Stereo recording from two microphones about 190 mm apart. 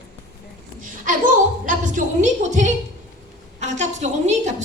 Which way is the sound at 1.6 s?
45° right (ahead or behind).